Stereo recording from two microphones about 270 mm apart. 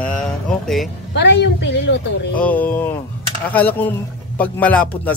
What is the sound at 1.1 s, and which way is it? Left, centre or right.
Speech, left.